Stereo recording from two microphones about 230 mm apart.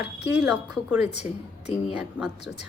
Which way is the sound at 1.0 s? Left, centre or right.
Left.